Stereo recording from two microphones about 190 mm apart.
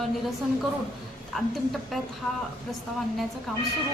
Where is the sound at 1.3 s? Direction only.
Centre (ahead or behind).